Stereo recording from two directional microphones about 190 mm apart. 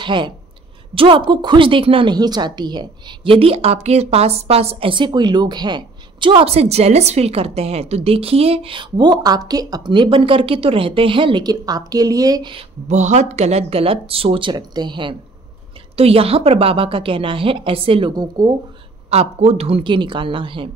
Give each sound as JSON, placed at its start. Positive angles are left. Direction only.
{"t": 0.0, "sound": "a woman's voice", "side_deg": -25}
{"t": 12.8, "sound": "a woman's voice", "side_deg": -35}
{"t": 19.0, "sound": "a woman's voice", "side_deg": -35}